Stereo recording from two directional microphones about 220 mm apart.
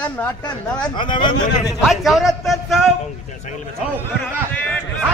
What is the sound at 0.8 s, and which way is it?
Speech, 20° left (ahead or behind).